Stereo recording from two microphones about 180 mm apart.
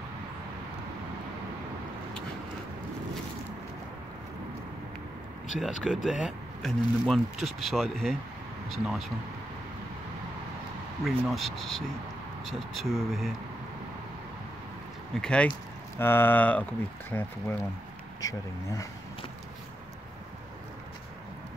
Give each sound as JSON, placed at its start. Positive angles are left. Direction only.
{"t": 5.6, "sound": "speech", "side_deg": -5}
{"t": 11.1, "sound": "speech", "side_deg": 0}
{"t": 15.1, "sound": "speech", "side_deg": 5}